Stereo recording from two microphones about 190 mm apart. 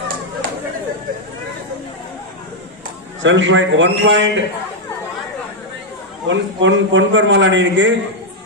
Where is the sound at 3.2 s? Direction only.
80° right.